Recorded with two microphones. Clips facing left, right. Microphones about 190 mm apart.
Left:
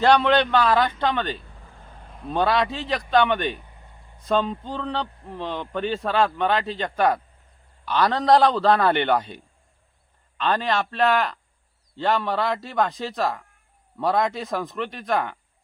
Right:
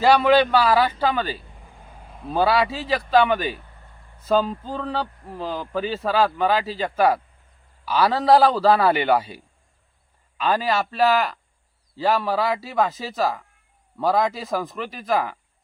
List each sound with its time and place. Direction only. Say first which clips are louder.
0.0 s a man's voice: right 2 dB; 5° right (ahead or behind)
3.6 s vehicle: even; 15° left (ahead or behind)
4.2 s speech: right 2 dB; 5° right (ahead or behind)